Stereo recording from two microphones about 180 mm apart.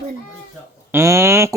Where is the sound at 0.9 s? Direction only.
15° right (ahead or behind).